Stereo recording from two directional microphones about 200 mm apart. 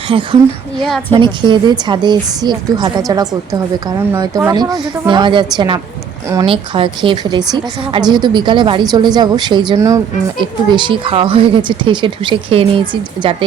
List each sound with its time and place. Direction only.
0.1 s speech: 25° right (ahead or behind)